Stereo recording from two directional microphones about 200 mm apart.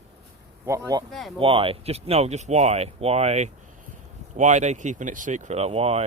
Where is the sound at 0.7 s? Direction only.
20° right (ahead or behind).